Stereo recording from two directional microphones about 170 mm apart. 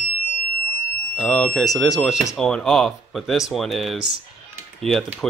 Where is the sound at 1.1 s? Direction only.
10° left (ahead or behind).